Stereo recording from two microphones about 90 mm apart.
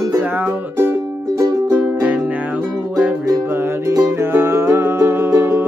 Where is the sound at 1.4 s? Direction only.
45° right (ahead or behind).